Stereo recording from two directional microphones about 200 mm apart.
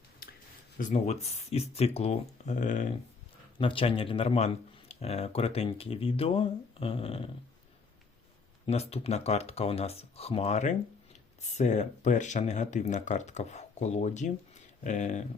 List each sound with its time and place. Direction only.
0.8 s speech: 40° left (ahead or behind)
3.6 s speech: 25° left (ahead or behind)
8.6 s speech: 30° left (ahead or behind)